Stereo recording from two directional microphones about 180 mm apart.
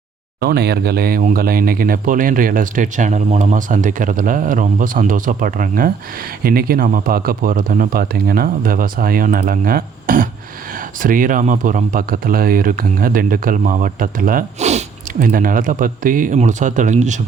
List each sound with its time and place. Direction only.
0.3 s speech: 60° right (ahead or behind); by 15.3 s 40° right (ahead or behind)
15.3 s speech: 50° right (ahead or behind)